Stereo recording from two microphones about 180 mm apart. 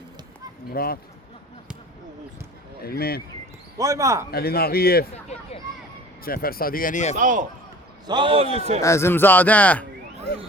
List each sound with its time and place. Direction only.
0.7 s speech: 55° left (ahead or behind)
2.8 s speech: 60° left (ahead or behind)
3.8 s speech: 20° right (ahead or behind)
4.3 s speech: 60° left (ahead or behind)
5.1 s a sound: 35° left (ahead or behind)
6.2 s speech: 55° left (ahead or behind)
7.2 s a man's voice: 45° right (ahead or behind)
8.0 s a man's voice: 25° right (ahead or behind)
8.8 s speech: 15° left (ahead or behind)